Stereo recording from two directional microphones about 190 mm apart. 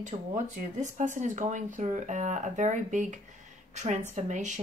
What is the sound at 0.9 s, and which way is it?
Speech, 40° right (ahead or behind).